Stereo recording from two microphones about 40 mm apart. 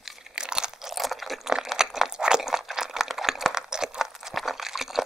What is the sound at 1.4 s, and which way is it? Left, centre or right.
Crunch, centre.